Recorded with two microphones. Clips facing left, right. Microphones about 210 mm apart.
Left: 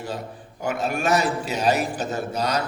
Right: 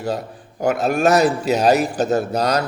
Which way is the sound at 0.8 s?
40° right (ahead or behind).